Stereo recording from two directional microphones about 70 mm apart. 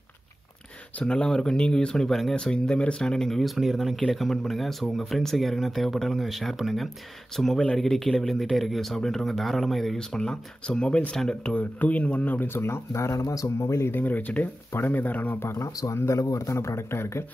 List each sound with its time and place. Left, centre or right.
0.9 s speech: centre; by 13.8 s left
13.8 s speech: left
15.3 s speech: left
15.7 s speech: left
16.0 s a man's voice: left